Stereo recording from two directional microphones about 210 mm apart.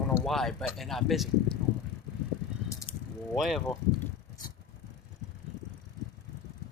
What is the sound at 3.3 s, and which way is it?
Speech, centre (ahead or behind).